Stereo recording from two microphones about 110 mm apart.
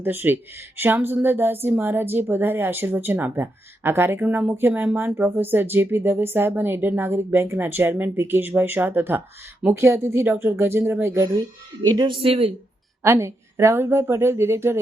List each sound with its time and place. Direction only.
0.0 s a woman's voice: 20° right (ahead or behind); by 12.5 s 55° right (ahead or behind)
13.0 s a woman's voice: 25° right (ahead or behind)